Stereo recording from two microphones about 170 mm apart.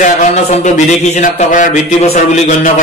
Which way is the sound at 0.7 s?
50° left (ahead or behind).